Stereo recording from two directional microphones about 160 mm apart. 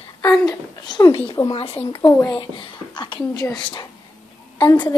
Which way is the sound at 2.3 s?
30° left (ahead or behind).